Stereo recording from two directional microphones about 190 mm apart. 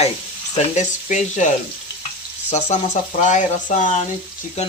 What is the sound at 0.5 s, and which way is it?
Speech, 40° left (ahead or behind).